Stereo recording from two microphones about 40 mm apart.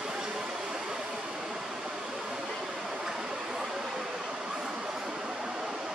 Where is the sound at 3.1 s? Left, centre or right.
Centre.